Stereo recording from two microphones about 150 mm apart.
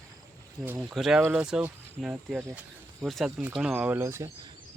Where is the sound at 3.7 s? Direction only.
15° right (ahead or behind).